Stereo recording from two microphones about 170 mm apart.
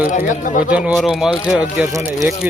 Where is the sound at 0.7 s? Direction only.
5° right (ahead or behind).